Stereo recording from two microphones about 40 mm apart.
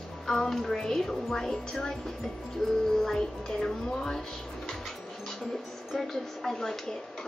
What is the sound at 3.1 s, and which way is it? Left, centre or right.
Speech, left.